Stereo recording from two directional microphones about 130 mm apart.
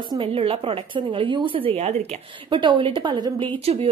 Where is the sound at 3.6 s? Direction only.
50° right (ahead or behind).